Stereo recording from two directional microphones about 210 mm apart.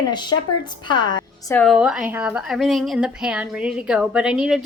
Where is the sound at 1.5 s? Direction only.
Centre (ahead or behind).